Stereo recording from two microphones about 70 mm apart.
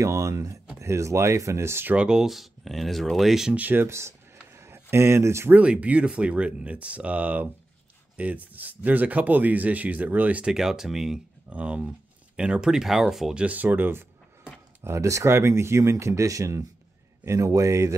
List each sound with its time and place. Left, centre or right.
0.0 s speech: right
2.0 s speech: centre
3.5 s speech: right
4.6 s a sound: right
5.5 s speech: centre
10.5 s speech: centre
11.5 s speech: centre
13.4 s speech: right
14.8 s speech: right